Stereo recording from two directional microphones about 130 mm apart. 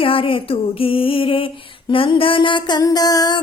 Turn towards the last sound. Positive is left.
turn(degrees=30)  # may be behind; listen again after turning